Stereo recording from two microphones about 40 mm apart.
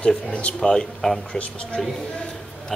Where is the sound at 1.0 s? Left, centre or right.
Centre.